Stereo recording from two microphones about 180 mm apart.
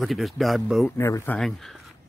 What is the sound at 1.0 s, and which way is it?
Speech, 15° left (ahead or behind).